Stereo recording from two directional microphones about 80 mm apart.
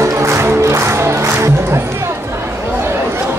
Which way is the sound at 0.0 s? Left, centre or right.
Right.